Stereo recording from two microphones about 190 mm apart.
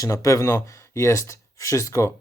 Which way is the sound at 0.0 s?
15° left (ahead or behind).